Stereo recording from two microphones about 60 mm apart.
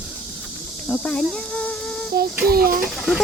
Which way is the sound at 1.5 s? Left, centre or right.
Left.